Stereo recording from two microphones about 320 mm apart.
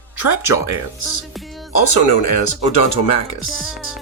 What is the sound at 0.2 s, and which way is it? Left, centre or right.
Speech, left.